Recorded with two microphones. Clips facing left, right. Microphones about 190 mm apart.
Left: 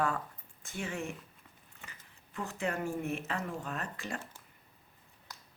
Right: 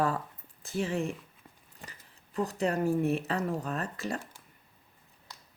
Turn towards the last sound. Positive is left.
turn(degrees=-35)  # may be behind; listen again after turning